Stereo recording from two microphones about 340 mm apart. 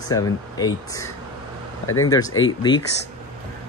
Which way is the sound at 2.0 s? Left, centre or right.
Centre.